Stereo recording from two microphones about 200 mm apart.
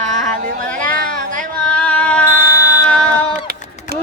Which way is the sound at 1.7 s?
5° left (ahead or behind).